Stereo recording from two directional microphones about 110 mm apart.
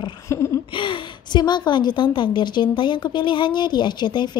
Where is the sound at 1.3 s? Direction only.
40° left (ahead or behind).